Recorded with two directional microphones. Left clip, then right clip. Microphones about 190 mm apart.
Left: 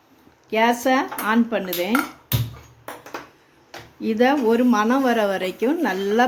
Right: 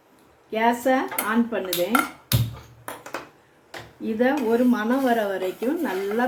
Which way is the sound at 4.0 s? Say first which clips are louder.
Left 4 dB; 55° left (ahead or behind).